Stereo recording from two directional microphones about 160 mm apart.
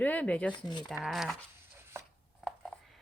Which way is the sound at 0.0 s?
10° left (ahead or behind).